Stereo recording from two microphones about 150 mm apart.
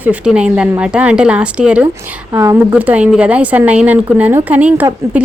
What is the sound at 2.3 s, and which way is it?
Speech, 20° right (ahead or behind).